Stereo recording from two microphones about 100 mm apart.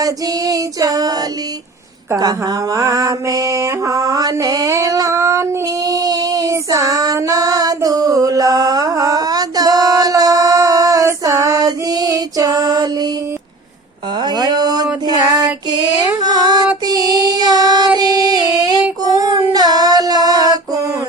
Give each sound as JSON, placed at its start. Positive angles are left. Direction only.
{"t": 0.0, "sound": "female singing", "side_deg": -35}
{"t": 2.1, "sound": "mantra", "side_deg": -40}
{"t": 14.2, "sound": "a sound", "side_deg": -45}
{"t": 16.2, "sound": "female singing", "side_deg": -45}